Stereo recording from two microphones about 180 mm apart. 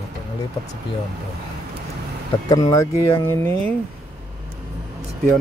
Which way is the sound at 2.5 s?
20° left (ahead or behind).